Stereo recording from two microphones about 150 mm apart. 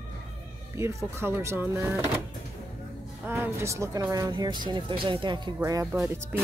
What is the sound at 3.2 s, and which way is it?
Speech, 15° right (ahead or behind).